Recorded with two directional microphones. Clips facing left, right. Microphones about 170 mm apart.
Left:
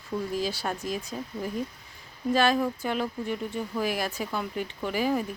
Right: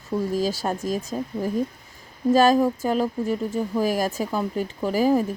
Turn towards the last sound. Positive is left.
turn(degrees=-40)  # may be behind; listen again after turning